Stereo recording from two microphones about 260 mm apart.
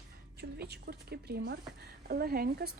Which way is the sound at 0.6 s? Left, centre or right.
Right.